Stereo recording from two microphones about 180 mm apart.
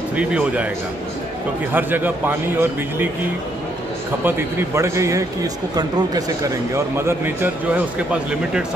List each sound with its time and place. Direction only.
0.1 s speech: 5° right (ahead or behind)
1.7 s speech: 10° right (ahead or behind)
4.2 s speech: 10° right (ahead or behind)